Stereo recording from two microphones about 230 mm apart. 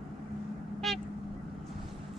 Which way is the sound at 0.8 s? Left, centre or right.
Centre.